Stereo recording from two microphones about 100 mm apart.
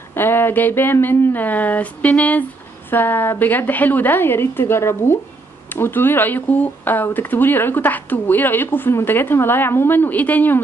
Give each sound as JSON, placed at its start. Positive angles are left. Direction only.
{"t": 0.1, "sound": "speech", "side_deg": 20}